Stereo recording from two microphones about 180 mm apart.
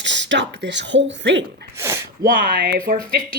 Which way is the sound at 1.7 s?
15° right (ahead or behind).